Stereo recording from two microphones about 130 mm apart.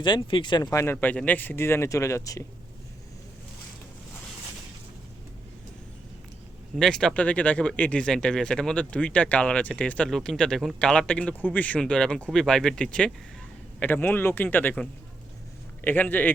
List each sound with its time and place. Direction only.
0.0 s speech: 40° left (ahead or behind)
0.7 s speech: 20° left (ahead or behind)
6.7 s speech: 5° left (ahead or behind)